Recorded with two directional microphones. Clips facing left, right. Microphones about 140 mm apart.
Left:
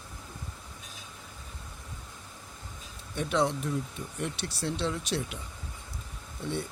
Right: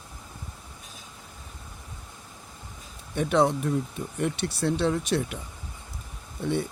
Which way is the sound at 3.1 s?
50° right (ahead or behind).